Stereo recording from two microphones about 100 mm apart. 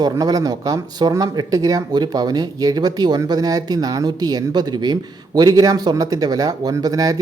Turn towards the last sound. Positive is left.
turn(degrees=-35)  # may be behind; listen again after turning